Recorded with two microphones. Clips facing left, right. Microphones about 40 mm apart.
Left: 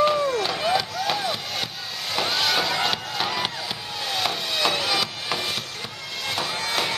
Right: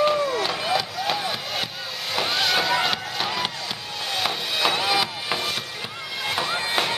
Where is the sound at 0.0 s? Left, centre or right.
Centre.